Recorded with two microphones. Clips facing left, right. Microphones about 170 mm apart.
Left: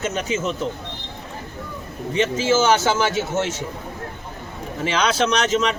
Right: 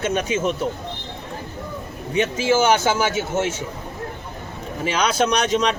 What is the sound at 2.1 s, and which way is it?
Speech, 10° right (ahead or behind).